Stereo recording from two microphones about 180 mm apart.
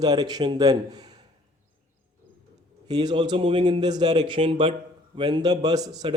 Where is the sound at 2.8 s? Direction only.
25° right (ahead or behind).